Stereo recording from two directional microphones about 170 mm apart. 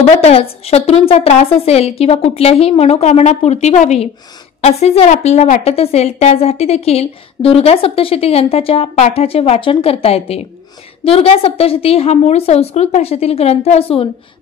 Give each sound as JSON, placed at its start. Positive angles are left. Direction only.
{"t": 0.2, "sound": "a woman's voice", "side_deg": 35}